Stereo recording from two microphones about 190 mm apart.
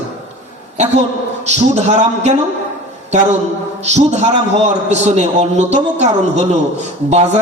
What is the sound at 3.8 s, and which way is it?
A man's voice, 35° right (ahead or behind).